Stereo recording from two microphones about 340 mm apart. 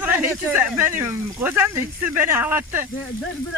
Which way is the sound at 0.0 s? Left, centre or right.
Centre.